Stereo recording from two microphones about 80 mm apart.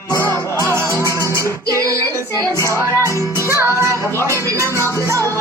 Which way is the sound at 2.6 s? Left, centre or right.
Left.